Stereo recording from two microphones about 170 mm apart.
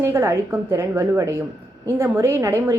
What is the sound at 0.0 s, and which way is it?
A woman's voice, 15° right (ahead or behind).